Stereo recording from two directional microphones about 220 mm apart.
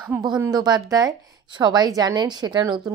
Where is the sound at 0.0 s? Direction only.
15° right (ahead or behind).